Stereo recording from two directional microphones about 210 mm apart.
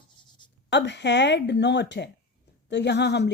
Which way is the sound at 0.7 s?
55° left (ahead or behind).